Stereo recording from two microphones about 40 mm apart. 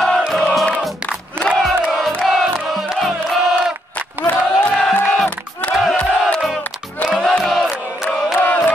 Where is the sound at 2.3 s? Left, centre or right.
Centre.